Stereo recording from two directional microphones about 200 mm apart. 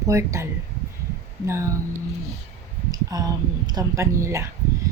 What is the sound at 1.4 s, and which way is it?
Speech, 15° right (ahead or behind).